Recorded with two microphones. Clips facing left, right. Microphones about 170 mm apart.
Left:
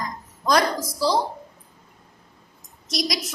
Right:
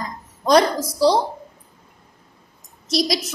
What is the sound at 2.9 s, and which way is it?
Speech, 30° right (ahead or behind).